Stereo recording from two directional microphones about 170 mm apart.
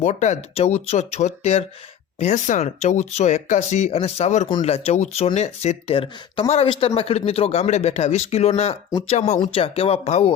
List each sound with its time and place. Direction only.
0.0 s speech: 45° left (ahead or behind)
9.4 s speech: 35° left (ahead or behind)